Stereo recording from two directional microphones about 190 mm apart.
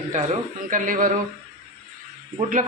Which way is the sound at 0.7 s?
45° right (ahead or behind).